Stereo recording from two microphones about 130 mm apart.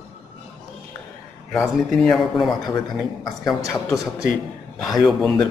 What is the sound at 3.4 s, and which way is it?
Speech, 25° left (ahead or behind).